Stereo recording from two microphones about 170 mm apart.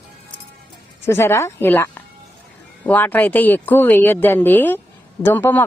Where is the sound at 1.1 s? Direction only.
15° left (ahead or behind).